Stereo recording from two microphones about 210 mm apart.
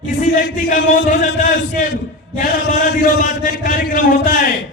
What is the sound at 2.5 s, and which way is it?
A man's voice, 40° left (ahead or behind).